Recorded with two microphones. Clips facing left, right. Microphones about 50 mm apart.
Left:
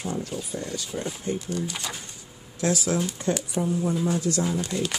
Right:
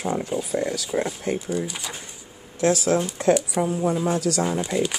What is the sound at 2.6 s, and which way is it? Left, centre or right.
Speech, right.